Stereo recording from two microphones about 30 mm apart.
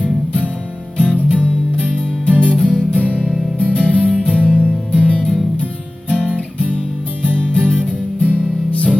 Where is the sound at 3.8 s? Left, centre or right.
Left.